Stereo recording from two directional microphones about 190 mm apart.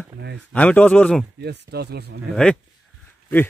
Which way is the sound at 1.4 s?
60° right (ahead or behind).